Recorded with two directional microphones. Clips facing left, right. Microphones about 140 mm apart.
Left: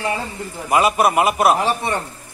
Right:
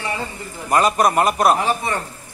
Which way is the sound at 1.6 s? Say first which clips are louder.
Left 1 dB; 25° left (ahead or behind).